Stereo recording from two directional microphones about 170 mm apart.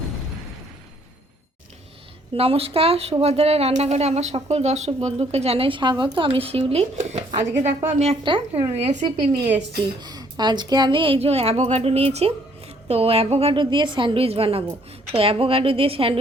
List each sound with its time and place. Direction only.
2.3 s a woman's voice: 35° right (ahead or behind)
9.0 s a woman's voice: 25° right (ahead or behind)